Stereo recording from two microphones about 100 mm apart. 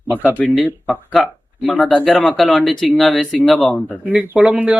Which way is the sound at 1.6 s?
10° left (ahead or behind).